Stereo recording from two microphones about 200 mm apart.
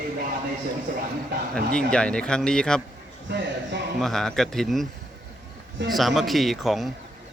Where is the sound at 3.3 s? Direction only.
60° right (ahead or behind).